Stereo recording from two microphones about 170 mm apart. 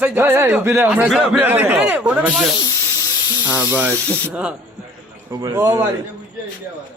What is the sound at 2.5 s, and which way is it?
Snake, 25° left (ahead or behind).